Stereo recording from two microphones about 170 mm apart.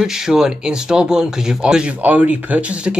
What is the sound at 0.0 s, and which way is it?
Speech, 5° right (ahead or behind).